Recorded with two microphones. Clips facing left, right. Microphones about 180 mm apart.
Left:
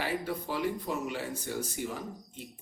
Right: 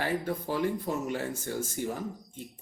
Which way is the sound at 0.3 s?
45° right (ahead or behind).